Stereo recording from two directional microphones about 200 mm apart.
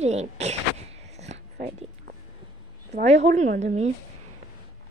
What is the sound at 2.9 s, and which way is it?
Speech, 35° right (ahead or behind).